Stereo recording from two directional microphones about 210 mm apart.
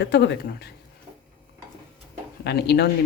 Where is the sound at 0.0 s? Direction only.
55° left (ahead or behind).